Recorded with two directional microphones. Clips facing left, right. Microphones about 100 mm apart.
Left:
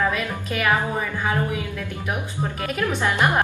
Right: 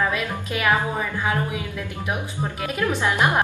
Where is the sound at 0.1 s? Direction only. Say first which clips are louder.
Even; 10° right (ahead or behind).